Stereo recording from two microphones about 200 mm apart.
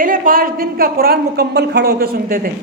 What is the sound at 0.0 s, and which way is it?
A woman's voice, 45° right (ahead or behind).